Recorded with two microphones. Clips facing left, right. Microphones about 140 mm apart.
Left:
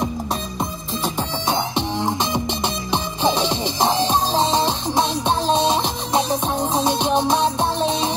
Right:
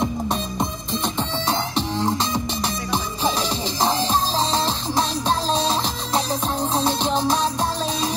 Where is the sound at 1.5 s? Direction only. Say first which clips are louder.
Left 3 dB; 20° left (ahead or behind).